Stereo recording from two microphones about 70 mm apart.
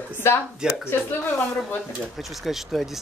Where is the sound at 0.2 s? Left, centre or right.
Left.